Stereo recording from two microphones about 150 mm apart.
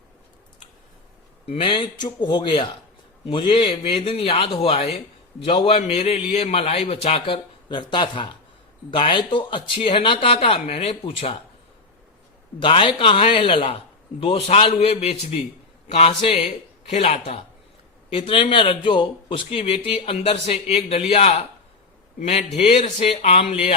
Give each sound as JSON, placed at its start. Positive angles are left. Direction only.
{"t": 1.5, "sound": "speech", "side_deg": 35}
{"t": 12.5, "sound": "speech", "side_deg": 35}